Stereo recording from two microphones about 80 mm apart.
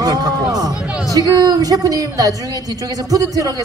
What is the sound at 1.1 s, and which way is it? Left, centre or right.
Speech, right.